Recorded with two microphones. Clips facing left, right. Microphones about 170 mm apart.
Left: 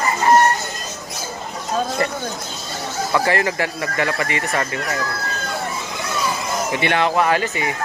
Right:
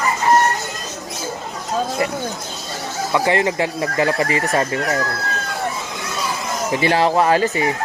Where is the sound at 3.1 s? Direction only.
25° right (ahead or behind).